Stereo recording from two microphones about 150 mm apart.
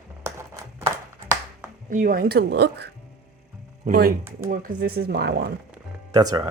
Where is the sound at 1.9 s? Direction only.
65° right (ahead or behind); by 2.8 s 90° right.